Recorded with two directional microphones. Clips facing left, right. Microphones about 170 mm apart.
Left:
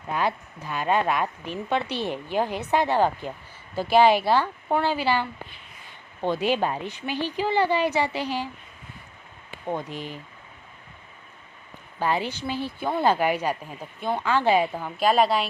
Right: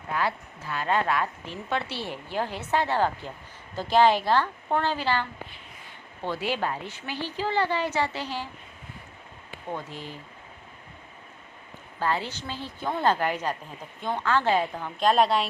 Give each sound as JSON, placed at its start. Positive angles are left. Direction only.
{"t": 0.1, "sound": "a woman's voice", "side_deg": 20}
{"t": 9.6, "sound": "a woman's voice", "side_deg": 15}
{"t": 11.9, "sound": "a woman's voice", "side_deg": 15}